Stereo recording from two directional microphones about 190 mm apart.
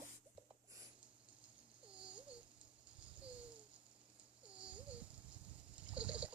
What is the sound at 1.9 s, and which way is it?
Babbling, 5° right (ahead or behind).